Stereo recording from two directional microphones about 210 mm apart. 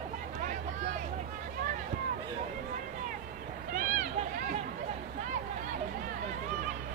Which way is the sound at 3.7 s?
35° right (ahead or behind).